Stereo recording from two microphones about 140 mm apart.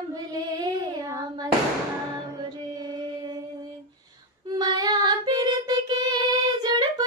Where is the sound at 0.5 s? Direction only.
25° right (ahead or behind).